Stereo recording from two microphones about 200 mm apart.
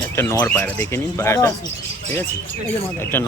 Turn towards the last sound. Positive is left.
turn(degrees=10)  # may be behind; listen again after turning